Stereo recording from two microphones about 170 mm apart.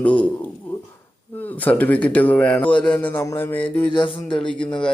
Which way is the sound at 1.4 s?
10° left (ahead or behind).